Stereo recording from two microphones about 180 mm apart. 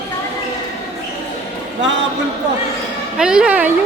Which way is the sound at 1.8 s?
85° right.